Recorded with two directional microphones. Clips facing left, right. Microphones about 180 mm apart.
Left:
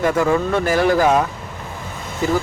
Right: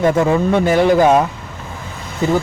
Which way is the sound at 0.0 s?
20° right (ahead or behind).